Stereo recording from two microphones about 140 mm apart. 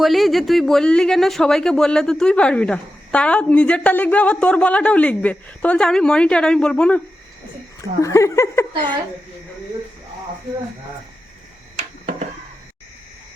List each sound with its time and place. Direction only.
0.0 s speech: centre (ahead or behind)
7.8 s speech: 20° left (ahead or behind)